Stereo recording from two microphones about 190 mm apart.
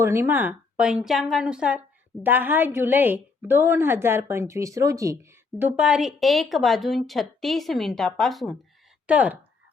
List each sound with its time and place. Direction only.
0.0 s a woman's voice: 15° right (ahead or behind)